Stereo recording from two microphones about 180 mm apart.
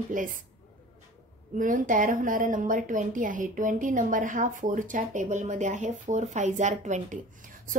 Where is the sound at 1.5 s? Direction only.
50° right (ahead or behind).